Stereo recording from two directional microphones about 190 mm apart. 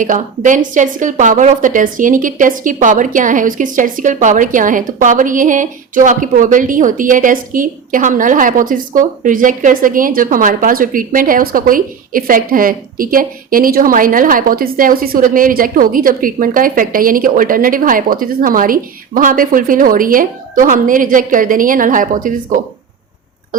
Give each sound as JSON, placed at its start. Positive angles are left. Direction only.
{"t": 0.0, "sound": "a woman's voice", "side_deg": -45}